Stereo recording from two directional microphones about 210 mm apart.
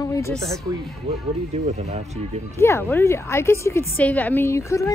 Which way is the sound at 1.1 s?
30° right (ahead or behind).